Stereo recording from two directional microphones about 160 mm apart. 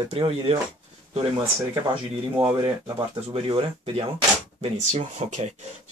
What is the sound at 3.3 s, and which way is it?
Speech, 35° right (ahead or behind).